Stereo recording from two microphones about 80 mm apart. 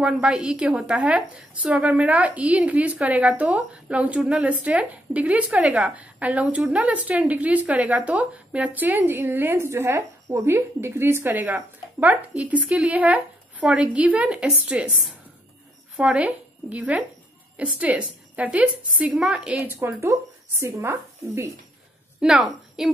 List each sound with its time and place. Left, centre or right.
0.0 s a woman's voice: centre
16.0 s a woman's voice: centre
19.0 s a woman's voice: centre
19.7 s speech: right
22.2 s a woman's voice: centre